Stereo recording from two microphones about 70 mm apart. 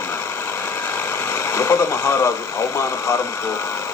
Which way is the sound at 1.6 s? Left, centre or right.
Left.